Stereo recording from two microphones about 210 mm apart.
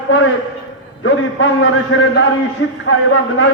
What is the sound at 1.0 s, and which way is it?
A man's voice, 70° left (ahead or behind).